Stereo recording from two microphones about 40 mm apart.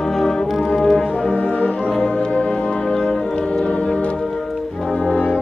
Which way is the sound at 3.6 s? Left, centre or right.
Left.